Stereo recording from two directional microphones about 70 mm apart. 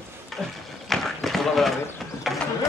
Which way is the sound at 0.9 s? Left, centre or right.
Centre.